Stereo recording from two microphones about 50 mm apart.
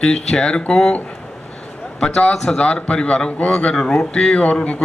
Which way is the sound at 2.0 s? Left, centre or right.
Centre.